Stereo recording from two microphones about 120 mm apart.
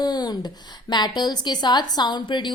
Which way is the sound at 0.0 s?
35° left (ahead or behind).